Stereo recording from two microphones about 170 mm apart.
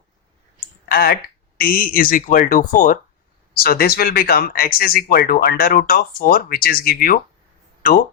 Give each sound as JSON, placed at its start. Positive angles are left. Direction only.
{"t": 0.9, "sound": "speech", "side_deg": 60}
{"t": 3.6, "sound": "speech", "side_deg": 60}